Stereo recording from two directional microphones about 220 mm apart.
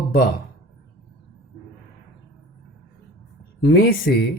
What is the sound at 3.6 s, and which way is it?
Speech, 45° left (ahead or behind).